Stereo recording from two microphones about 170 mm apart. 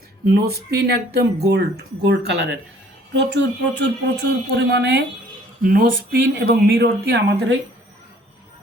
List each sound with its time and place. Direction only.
0.3 s speech: 70° right (ahead or behind)
3.1 s speech: 90° right
5.6 s speech: 55° right (ahead or behind); by 7.5 s 80° right